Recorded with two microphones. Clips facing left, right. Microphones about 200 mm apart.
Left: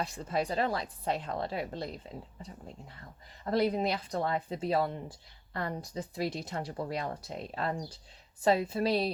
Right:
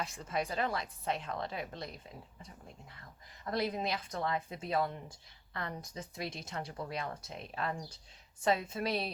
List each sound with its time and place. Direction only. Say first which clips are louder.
0.0 s speech: left 4 dB; 35° left (ahead or behind)
3.4 s speech: left 6 dB; 30° left (ahead or behind)